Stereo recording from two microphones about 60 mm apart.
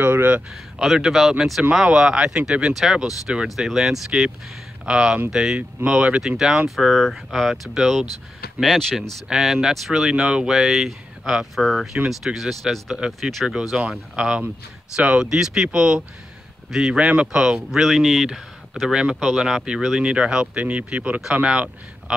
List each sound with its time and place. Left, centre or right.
0.0 s speech: right
0.7 s speech: centre
5.9 s speech: centre
6.2 s speech: centre
8.5 s speech: centre
9.3 s speech: centre
13.5 s speech: centre
20.0 s speech: centre